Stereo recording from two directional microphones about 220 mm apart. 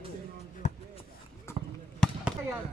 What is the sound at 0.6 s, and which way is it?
Basketball bounce, 35° left (ahead or behind).